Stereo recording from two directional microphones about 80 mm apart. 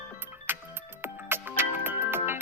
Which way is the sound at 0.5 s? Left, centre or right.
Right.